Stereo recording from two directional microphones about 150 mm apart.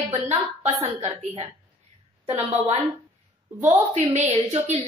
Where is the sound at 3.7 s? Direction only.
45° right (ahead or behind).